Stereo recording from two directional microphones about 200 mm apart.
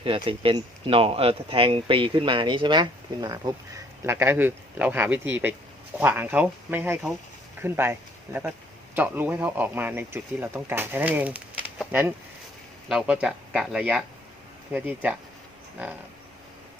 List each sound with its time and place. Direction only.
0.0 s speech: 25° right (ahead or behind); by 15.1 s 5° right (ahead or behind)